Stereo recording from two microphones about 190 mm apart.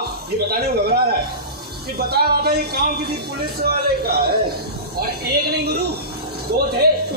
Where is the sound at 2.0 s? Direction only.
55° right (ahead or behind).